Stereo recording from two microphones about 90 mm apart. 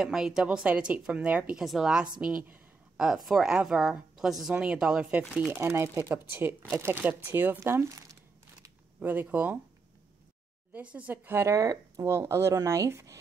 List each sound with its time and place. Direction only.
0.0 s speech: 5° right (ahead or behind)
3.0 s a woman's voice: 5° right (ahead or behind)
5.5 s speech: 30° right (ahead or behind)
9.0 s speech: 20° right (ahead or behind)
10.7 s speech: 15° right (ahead or behind)
11.5 s speech: 35° right (ahead or behind)